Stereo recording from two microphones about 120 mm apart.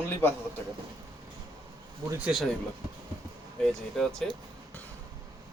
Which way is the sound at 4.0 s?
5° left (ahead or behind).